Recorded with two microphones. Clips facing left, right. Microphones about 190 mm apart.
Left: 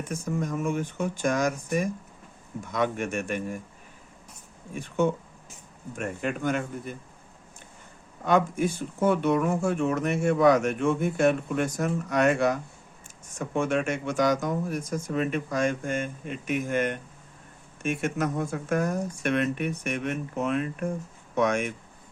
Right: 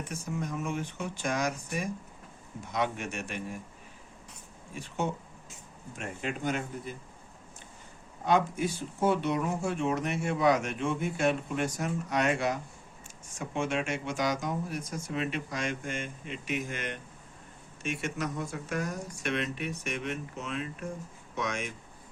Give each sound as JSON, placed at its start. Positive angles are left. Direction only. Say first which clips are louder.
{"t": 0.1, "sound": "speech", "louder": "left 7 dB", "side_deg": 50}
{"t": 4.7, "sound": "speech", "louder": "left 8 dB", "side_deg": 55}
{"t": 8.2, "sound": "speech", "louder": "left 4 dB", "side_deg": 50}